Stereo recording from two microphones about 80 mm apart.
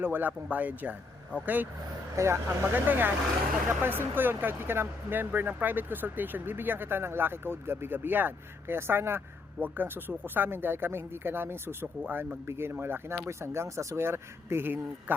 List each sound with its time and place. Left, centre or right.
0.0 s speech: right
2.1 s speech: right
2.7 s speech: right